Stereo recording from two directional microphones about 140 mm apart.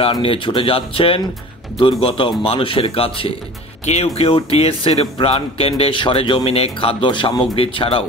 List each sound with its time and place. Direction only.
0.0 s speech: 40° left (ahead or behind)